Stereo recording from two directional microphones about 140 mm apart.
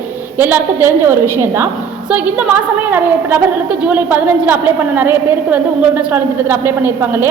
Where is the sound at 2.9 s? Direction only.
15° right (ahead or behind).